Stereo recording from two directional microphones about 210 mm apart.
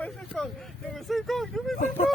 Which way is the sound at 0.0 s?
Centre (ahead or behind).